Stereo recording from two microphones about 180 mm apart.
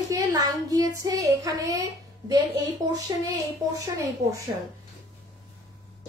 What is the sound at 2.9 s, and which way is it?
Speech, 20° right (ahead or behind).